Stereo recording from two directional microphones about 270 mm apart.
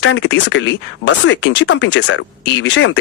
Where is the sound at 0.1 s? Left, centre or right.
Left.